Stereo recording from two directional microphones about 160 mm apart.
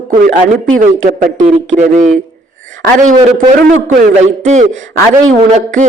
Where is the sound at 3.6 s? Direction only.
55° right (ahead or behind).